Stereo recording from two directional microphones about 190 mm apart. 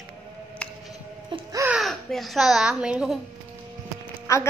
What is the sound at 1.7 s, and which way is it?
Speech, centre (ahead or behind).